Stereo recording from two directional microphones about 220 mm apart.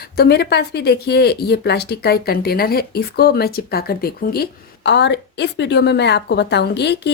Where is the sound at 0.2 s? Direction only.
45° left (ahead or behind).